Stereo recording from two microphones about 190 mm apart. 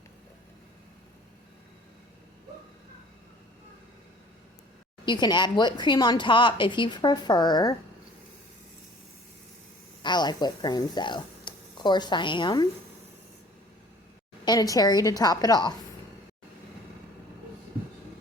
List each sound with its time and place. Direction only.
5.0 s speech: 25° left (ahead or behind)
10.0 s speech: 25° left (ahead or behind)
14.4 s speech: 20° left (ahead or behind)